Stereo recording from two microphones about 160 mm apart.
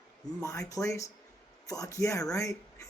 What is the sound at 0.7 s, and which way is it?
Speech, 20° left (ahead or behind).